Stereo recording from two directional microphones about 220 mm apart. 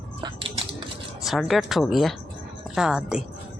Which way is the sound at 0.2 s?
25° right (ahead or behind).